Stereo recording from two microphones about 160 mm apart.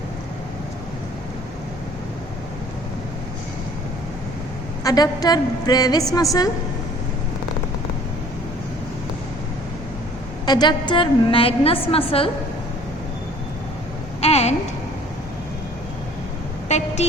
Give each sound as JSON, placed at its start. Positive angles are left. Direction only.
{"t": 4.8, "sound": "a woman's voice", "side_deg": 25}
{"t": 10.4, "sound": "a woman's voice", "side_deg": 25}
{"t": 14.2, "sound": "a sound", "side_deg": 40}
{"t": 16.6, "sound": "vehicle", "side_deg": 45}